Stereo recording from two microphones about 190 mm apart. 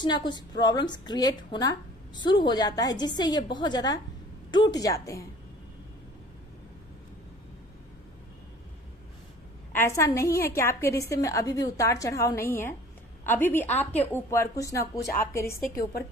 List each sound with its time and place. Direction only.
0.0 s a woman's voice: 25° left (ahead or behind)
9.7 s a woman's voice: 15° left (ahead or behind)